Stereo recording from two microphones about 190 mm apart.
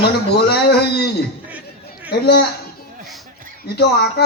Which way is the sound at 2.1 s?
60° left (ahead or behind).